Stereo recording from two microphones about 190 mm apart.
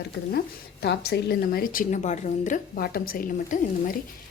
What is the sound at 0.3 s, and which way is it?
A woman's voice, 60° left (ahead or behind).